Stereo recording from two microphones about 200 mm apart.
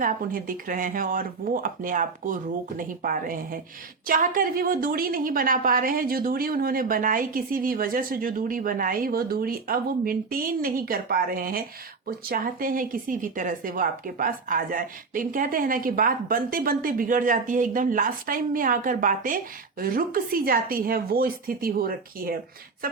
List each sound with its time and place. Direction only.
0.0 s a woman's voice: 45° right (ahead or behind)